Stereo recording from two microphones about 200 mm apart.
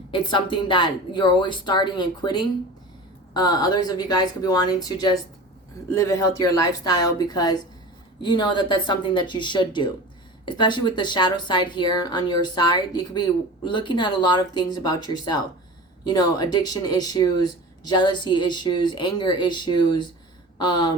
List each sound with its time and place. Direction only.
0.1 s speech: 25° left (ahead or behind)